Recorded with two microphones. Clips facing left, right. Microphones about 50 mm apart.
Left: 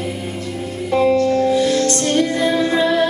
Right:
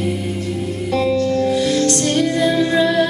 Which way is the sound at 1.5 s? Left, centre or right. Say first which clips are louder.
Left 1 dB; centre.